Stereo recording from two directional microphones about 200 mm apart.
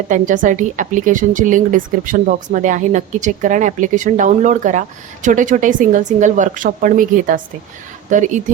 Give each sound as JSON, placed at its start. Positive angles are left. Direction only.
{"t": 0.1, "sound": "a woman's voice", "side_deg": -40}